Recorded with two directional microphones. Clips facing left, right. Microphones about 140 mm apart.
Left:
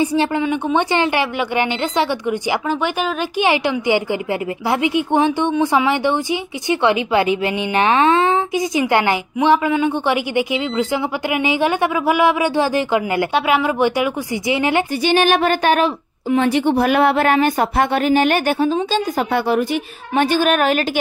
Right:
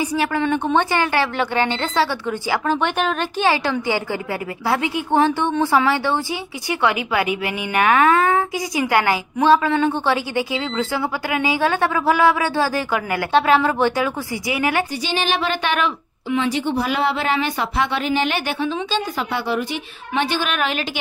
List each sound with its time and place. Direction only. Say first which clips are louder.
0.0 s a woman's voice: left 4 dB; 25° left (ahead or behind)
0.4 s a woman's voice: left 1 dB; 10° left (ahead or behind)
3.3 s a woman's voice: left 3 dB; 15° left (ahead or behind)
15.0 s a woman's voice: left 7 dB; 55° left (ahead or behind)